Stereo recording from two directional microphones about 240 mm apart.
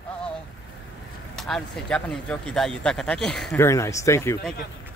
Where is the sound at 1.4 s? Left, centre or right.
Centre.